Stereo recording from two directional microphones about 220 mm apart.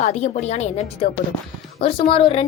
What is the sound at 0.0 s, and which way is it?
A woman's voice, 30° left (ahead or behind).